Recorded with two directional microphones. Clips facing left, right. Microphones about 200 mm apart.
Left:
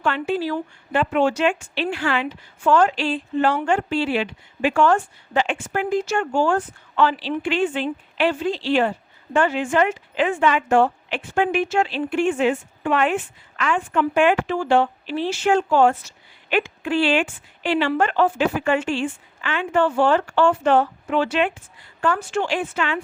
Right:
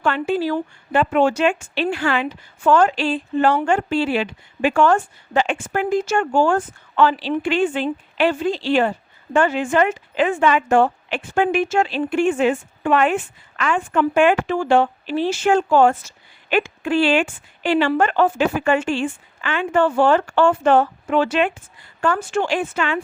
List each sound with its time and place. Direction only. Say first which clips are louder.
0.0 s a woman's voice: right 2 dB; 45° right (ahead or behind)